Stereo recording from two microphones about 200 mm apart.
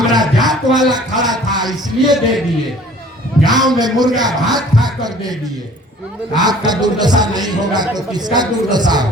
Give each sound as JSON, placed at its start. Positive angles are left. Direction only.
{"t": 0.1, "sound": "music", "side_deg": -20}
{"t": 3.4, "sound": "a man's voice", "side_deg": -20}